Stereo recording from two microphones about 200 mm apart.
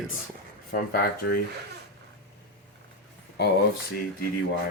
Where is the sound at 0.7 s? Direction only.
50° left (ahead or behind).